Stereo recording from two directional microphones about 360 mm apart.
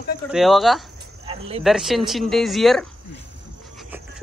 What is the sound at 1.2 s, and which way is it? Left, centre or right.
Cricket, centre.